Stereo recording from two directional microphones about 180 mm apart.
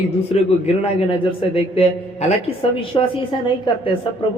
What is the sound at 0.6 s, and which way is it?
A woman's voice, 35° left (ahead or behind).